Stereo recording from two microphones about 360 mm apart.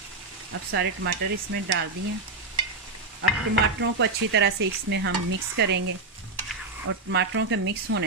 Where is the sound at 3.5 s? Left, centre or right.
Right.